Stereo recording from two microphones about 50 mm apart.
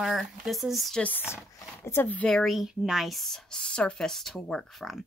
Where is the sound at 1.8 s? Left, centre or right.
Left.